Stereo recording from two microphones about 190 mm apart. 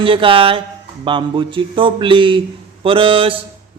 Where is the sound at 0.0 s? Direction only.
25° right (ahead or behind).